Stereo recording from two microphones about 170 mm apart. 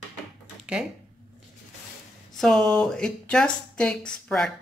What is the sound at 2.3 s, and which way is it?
Speech, 5° left (ahead or behind).